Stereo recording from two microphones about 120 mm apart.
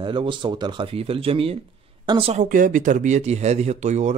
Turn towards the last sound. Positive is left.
turn(degrees=-75)  # may be behind; listen again after turning